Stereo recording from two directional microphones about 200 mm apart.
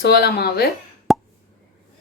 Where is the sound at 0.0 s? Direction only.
50° left (ahead or behind).